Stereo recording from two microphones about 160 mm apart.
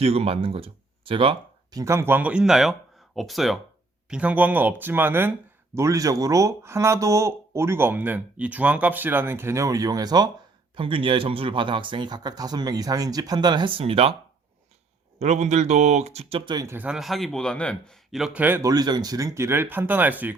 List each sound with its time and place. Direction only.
0.0 s speech: 40° right (ahead or behind)
1.8 s a man's voice: 15° right (ahead or behind); by 14.2 s 35° right (ahead or behind)
15.2 s speech: 45° right (ahead or behind)
16.5 s speech: 25° right (ahead or behind)
16.7 s a man's voice: 5° right (ahead or behind)
18.7 s speech: 25° right (ahead or behind)